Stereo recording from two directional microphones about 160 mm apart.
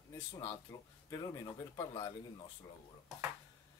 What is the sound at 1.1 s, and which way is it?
Speech, 20° left (ahead or behind).